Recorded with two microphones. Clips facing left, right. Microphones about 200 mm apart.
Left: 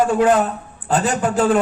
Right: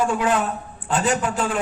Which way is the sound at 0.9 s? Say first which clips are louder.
Left 3 dB; 40° left (ahead or behind).